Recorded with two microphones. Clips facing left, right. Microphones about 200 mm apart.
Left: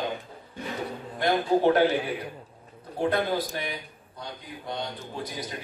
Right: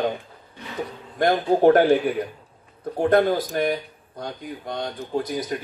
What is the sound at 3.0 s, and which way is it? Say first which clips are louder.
Speech: right 7 dB; 45° right (ahead or behind).